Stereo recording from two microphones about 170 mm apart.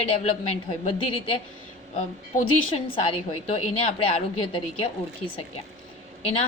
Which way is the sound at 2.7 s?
35° left (ahead or behind).